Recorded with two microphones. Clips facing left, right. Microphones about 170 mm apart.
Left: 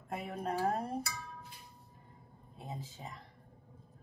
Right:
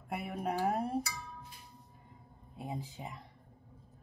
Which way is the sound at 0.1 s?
10° right (ahead or behind).